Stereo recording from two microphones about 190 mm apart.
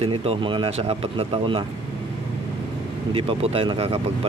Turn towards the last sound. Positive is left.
turn(degrees=-30)  # may be behind; listen again after turning